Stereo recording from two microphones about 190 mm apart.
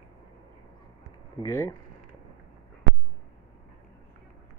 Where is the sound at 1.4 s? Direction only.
15° left (ahead or behind).